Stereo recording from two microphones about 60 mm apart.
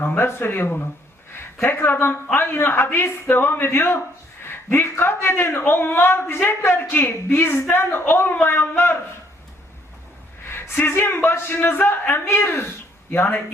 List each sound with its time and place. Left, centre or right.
0.0 s a man's voice: left
10.4 s a man's voice: left